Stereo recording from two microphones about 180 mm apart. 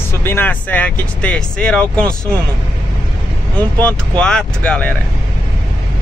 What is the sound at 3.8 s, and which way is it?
Speech, 5° left (ahead or behind).